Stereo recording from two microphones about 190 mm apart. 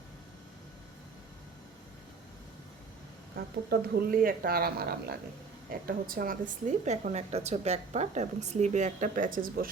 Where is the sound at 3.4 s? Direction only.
55° right (ahead or behind).